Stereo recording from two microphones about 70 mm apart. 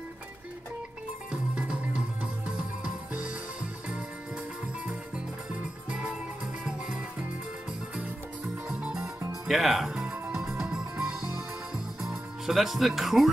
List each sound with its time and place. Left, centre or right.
1.3 s music: centre
5.5 s music: centre
8.6 s music: centre
9.0 s music: right
9.5 s speech: centre
10.3 s music: centre